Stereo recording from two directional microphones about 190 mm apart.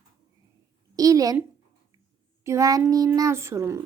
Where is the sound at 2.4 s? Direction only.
15° right (ahead or behind).